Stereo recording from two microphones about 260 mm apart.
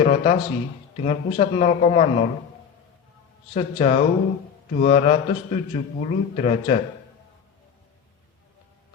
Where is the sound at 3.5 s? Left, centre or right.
Left.